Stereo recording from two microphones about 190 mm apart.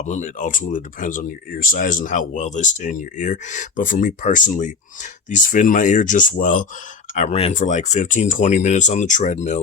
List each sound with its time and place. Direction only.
0.0 s speech: 40° left (ahead or behind)